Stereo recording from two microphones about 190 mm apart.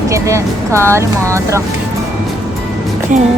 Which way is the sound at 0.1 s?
15° right (ahead or behind).